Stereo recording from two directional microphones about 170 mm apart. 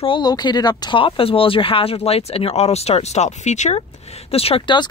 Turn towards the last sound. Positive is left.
turn(degrees=30)  # may be behind; listen again after turning